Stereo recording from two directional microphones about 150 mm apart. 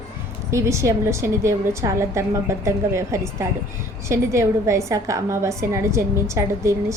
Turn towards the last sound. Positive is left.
turn(degrees=-20)  # may be behind; listen again after turning